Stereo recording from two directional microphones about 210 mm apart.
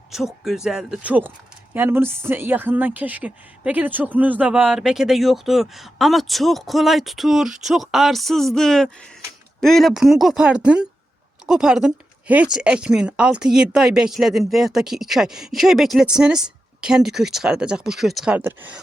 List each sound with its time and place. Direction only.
0.1 s a woman's voice: centre (ahead or behind)